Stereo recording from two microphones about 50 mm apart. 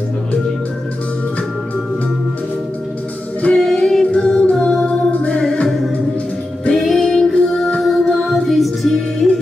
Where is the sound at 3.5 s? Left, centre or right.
Centre.